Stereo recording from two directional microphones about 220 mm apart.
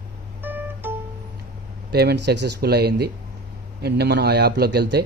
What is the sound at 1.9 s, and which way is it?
Speech, 50° right (ahead or behind).